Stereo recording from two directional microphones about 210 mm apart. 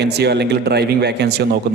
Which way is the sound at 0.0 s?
50° right (ahead or behind).